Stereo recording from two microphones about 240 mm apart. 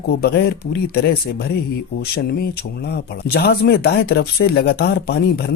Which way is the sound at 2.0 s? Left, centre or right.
Left.